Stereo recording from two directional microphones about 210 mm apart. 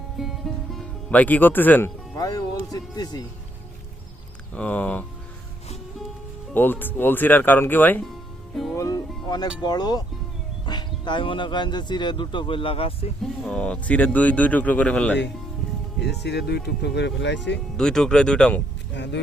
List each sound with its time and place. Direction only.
0.2 s music: centre (ahead or behind); by 3.2 s 20° left (ahead or behind)
4.5 s speech: 5° left (ahead or behind)
6.5 s speech: 10° left (ahead or behind)
8.7 s music: 15° left (ahead or behind)
9.6 s speech: 20° left (ahead or behind)
13.4 s speech: 5° left (ahead or behind)
16.0 s speech: 55° left (ahead or behind)
17.7 s speech: 5° left (ahead or behind)
18.9 s speech: 55° left (ahead or behind)